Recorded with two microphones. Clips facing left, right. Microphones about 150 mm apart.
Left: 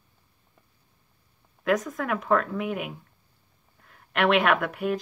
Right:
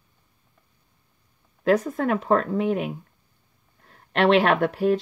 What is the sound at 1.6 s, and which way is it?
Speech, 30° right (ahead or behind).